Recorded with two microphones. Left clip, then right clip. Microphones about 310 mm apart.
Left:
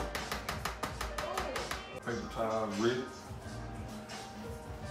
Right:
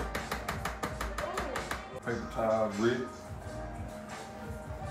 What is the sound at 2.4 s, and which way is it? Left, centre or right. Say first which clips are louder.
Speech: right 4 dB; centre.